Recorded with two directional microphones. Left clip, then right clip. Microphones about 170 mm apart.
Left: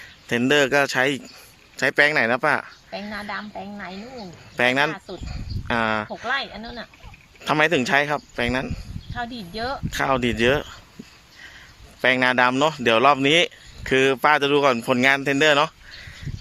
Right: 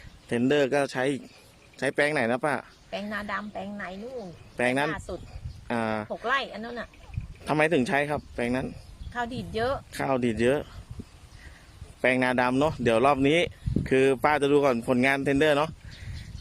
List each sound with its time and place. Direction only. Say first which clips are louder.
0.3 s speech: left 5 dB; 5° left (ahead or behind)
3.1 s speech: left 2 dB; 35° right (ahead or behind)
4.5 s speech: left 6 dB; centre (ahead or behind)
4.9 s speech: left 2 dB; 30° right (ahead or behind)
5.6 s speech: left 7 dB; centre (ahead or behind)
6.2 s speech: right 2 dB; 35° right (ahead or behind)
7.4 s speech: left 5 dB; centre (ahead or behind)
9.1 s speech: even; 30° right (ahead or behind)
9.7 s speech: left 6 dB; 5° right (ahead or behind)
12.0 s speech: left 6 dB; centre (ahead or behind)